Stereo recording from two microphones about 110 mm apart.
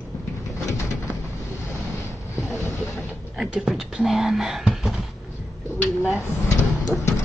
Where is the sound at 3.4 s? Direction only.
5° right (ahead or behind).